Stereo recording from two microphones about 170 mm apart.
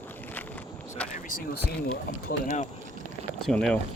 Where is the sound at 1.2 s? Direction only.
60° left (ahead or behind).